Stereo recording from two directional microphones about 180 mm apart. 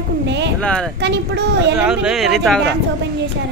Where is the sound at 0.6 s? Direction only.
5° left (ahead or behind).